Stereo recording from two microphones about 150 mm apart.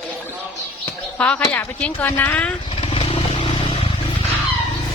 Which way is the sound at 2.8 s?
40° left (ahead or behind).